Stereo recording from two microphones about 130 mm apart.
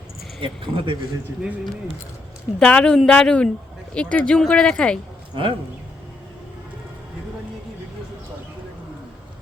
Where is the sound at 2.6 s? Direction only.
10° left (ahead or behind).